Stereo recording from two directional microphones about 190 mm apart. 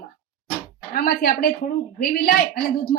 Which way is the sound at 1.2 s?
55° left (ahead or behind).